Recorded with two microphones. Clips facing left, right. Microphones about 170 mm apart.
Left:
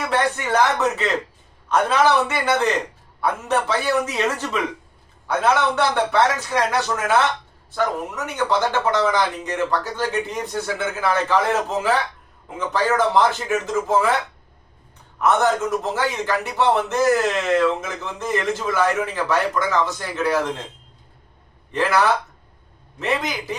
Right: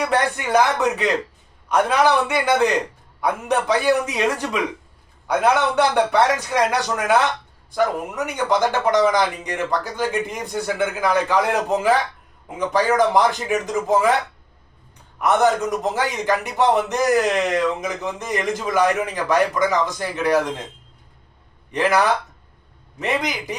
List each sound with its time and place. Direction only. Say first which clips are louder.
0.0 s a man's voice: right 1 dB; 15° right (ahead or behind)
15.2 s a man's voice: right 1 dB; 15° right (ahead or behind)
21.7 s a man's voice: right 1 dB; 15° right (ahead or behind)